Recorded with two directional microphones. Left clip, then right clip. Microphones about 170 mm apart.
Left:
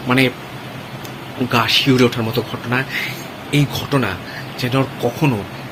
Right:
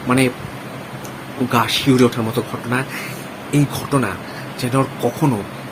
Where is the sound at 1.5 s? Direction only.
15° right (ahead or behind).